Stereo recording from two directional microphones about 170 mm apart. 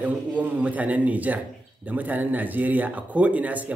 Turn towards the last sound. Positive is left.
turn(degrees=-10)  # may be behind; listen again after turning